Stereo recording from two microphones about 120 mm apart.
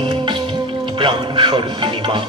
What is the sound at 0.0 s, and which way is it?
Music, 45° right (ahead or behind).